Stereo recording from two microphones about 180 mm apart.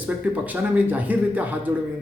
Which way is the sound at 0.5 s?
10° right (ahead or behind).